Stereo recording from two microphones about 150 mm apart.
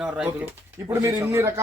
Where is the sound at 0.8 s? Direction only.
20° right (ahead or behind).